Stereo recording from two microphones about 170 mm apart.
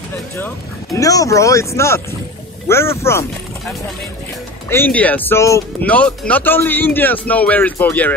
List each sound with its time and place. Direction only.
0.9 s speech: 20° left (ahead or behind)
4.6 s speech: 10° left (ahead or behind)